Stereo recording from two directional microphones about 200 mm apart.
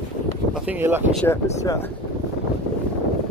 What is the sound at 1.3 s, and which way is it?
Speech, 15° left (ahead or behind).